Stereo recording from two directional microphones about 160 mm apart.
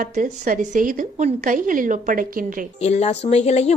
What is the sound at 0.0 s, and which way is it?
A woman's voice, 55° right (ahead or behind).